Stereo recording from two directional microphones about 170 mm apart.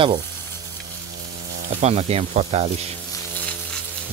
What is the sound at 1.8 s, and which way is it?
Speech, 40° right (ahead or behind).